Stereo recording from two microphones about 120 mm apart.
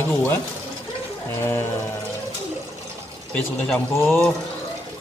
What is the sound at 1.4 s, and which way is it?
Music, 20° left (ahead or behind).